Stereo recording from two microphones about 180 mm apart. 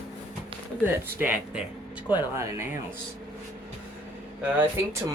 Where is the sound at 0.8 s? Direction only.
10° right (ahead or behind).